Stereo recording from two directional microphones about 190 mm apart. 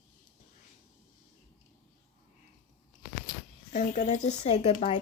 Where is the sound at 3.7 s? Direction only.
40° left (ahead or behind).